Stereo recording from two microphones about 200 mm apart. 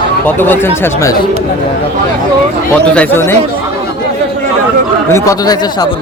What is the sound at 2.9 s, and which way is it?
Speech, 10° left (ahead or behind).